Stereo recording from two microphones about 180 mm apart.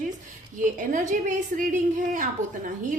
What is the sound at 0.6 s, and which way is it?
A woman's voice, 45° right (ahead or behind).